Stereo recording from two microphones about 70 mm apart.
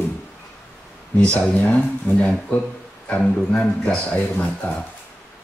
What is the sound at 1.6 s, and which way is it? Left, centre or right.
Speech, left.